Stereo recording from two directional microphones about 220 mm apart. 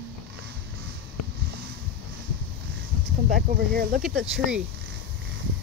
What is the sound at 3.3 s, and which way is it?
Speech, 45° right (ahead or behind).